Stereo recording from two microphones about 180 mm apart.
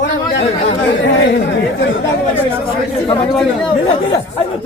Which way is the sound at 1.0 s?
80° left.